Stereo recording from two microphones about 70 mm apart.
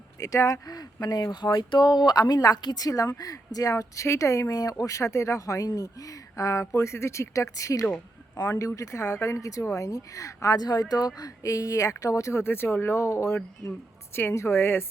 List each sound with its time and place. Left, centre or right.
0.2 s speech: left
10.6 s a woman's voice: left